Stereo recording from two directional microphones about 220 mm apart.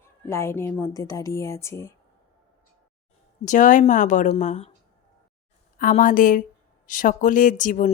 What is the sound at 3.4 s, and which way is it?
Speech, 35° left (ahead or behind).